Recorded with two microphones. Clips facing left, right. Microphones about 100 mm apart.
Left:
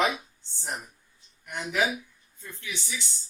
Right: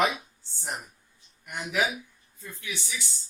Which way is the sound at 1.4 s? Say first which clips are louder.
Left 1 dB; 5° right (ahead or behind).